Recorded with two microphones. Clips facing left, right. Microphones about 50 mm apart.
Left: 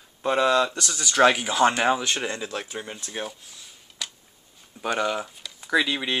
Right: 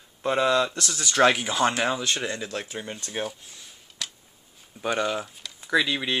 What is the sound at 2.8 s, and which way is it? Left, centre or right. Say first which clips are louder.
Speech: right 1 dB; centre.